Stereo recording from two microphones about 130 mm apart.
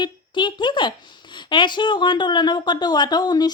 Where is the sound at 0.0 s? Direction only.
35° left (ahead or behind).